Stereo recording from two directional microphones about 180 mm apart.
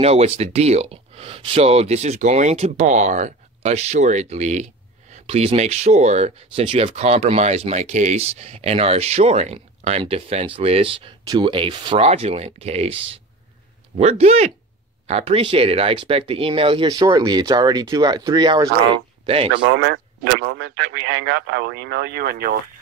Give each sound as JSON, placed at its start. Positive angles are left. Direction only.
{"t": 0.0, "sound": "speech", "side_deg": -35}
{"t": 19.6, "sound": "speech", "side_deg": -80}